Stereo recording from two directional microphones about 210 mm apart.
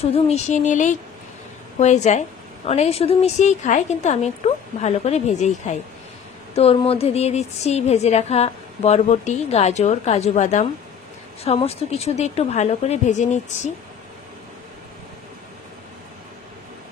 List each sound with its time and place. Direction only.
0.0 s a woman's voice: 30° left (ahead or behind)